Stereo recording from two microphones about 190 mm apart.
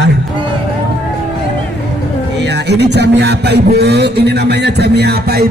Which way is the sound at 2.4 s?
60° right (ahead or behind).